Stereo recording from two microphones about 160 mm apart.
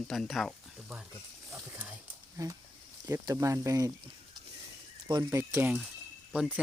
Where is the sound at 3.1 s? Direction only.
20° right (ahead or behind).